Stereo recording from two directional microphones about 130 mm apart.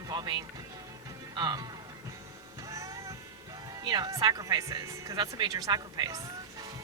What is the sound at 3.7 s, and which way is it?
Speech, 30° right (ahead or behind).